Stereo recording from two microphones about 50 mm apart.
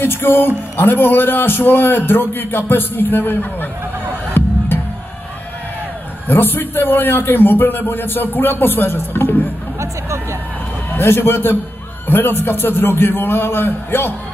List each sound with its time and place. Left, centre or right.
0.0 s a man's voice: left
4.4 s music: left
6.2 s a man's voice: left
9.8 s speech: right
11.0 s a man's voice: left